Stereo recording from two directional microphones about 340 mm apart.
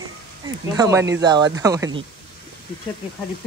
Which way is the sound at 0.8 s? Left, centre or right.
Centre.